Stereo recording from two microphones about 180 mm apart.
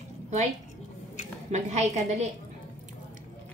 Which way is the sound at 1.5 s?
40° right (ahead or behind).